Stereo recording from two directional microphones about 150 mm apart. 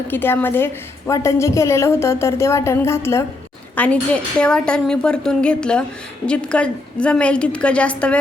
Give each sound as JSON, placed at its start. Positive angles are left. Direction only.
{"t": 0.1, "sound": "a woman's voice", "side_deg": 15}